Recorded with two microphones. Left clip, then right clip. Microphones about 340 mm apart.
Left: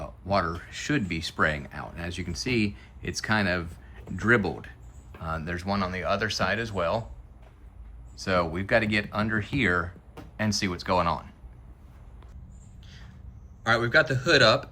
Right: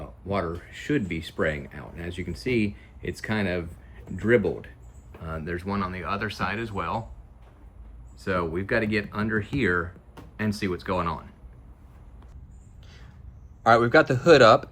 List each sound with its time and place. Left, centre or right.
0.0 s speech: centre
8.2 s speech: centre
13.7 s a man's voice: centre